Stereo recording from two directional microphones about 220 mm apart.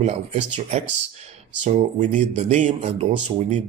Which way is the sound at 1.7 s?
35° right (ahead or behind).